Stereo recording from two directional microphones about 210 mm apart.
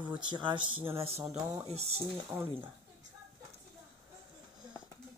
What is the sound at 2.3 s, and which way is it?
Speech, 10° right (ahead or behind).